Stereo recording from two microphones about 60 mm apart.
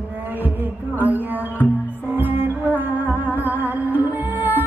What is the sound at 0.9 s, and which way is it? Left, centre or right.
Speech, right.